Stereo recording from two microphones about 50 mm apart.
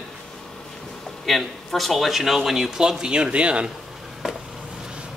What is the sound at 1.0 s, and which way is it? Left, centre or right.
Speech, centre.